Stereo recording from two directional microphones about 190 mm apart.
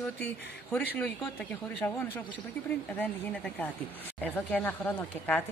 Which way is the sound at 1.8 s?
10° left (ahead or behind).